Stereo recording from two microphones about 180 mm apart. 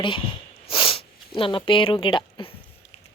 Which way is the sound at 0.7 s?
30° left (ahead or behind).